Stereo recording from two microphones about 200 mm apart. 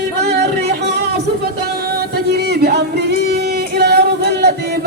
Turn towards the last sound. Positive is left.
turn(degrees=-55)  # may be behind; listen again after turning